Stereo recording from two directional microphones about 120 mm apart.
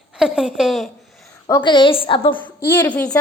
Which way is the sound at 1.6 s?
40° left (ahead or behind).